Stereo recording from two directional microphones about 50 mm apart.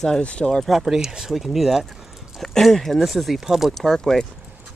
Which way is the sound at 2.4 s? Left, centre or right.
Centre.